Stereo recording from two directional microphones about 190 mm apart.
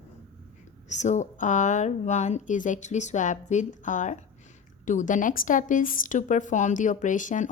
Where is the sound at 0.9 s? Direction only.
40° left (ahead or behind).